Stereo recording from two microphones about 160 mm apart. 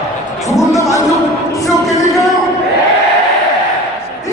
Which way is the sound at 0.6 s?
20° left (ahead or behind).